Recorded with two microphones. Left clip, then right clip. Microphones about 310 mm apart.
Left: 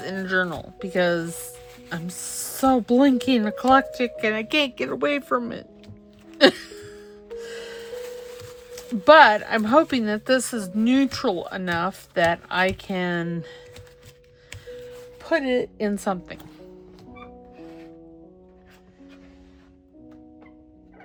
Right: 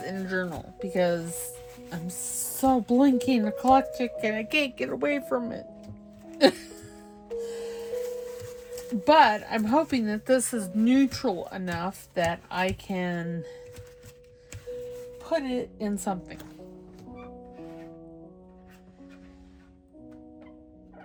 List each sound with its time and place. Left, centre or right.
0.0 s speech: centre
1.2 s speech: centre
1.9 s speech: centre
6.4 s music: centre
9.0 s speech: centre
15.2 s a woman's voice: left